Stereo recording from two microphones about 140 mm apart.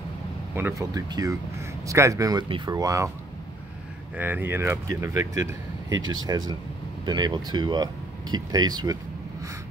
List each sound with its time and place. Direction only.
0.6 s speech: 15° right (ahead or behind)
0.9 s speech: 25° right (ahead or behind)
4.2 s speech: 15° right (ahead or behind)